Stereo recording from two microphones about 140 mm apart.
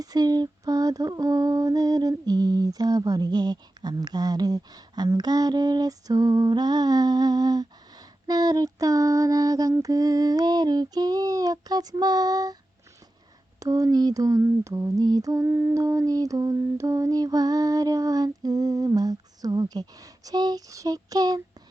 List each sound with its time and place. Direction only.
0.0 s female singing: 30° right (ahead or behind)
13.6 s female singing: 25° right (ahead or behind)